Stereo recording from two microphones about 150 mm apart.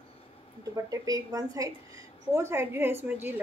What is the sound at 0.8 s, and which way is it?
A woman's voice, 25° right (ahead or behind).